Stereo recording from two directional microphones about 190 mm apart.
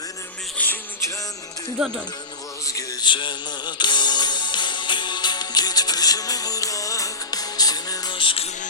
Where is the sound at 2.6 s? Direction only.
15° left (ahead or behind).